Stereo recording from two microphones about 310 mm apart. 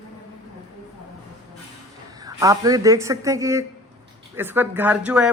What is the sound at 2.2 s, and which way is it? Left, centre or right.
Speech, centre.